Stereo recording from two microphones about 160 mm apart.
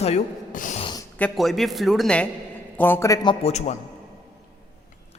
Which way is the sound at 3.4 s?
45° left (ahead or behind).